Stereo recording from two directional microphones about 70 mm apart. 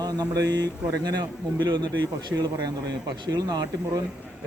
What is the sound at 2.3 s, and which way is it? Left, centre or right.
Speech, right.